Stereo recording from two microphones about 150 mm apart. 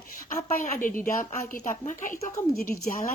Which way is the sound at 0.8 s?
65° left (ahead or behind).